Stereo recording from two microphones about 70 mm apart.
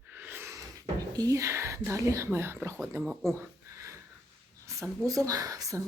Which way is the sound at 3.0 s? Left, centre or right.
Right.